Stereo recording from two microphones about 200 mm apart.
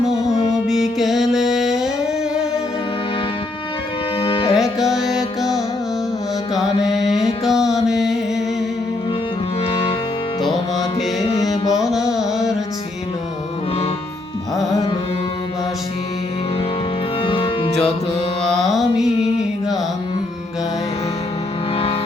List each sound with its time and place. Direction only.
0.7 s music: centre (ahead or behind)
4.2 s music: 25° left (ahead or behind)
4.5 s music: centre (ahead or behind)
9.6 s music: 30° left (ahead or behind)
11.2 s music: 30° left (ahead or behind)
11.8 s carnatic music: centre (ahead or behind)
12.1 s music: centre (ahead or behind)
17.2 s music: 25° left (ahead or behind)
18.6 s music: centre (ahead or behind)